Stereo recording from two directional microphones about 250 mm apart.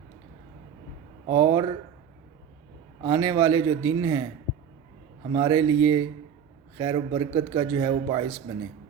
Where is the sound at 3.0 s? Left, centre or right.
Centre.